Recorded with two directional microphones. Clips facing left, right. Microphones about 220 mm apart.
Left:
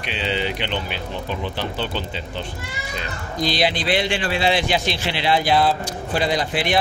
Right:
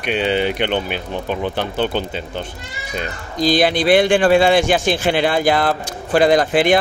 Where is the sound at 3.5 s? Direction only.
50° right (ahead or behind).